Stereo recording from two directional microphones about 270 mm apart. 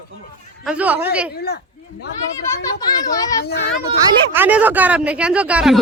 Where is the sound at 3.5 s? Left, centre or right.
Left.